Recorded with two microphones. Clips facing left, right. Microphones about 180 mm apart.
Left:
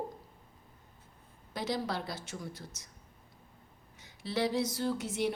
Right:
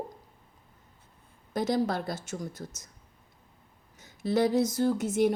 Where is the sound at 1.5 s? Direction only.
45° right (ahead or behind).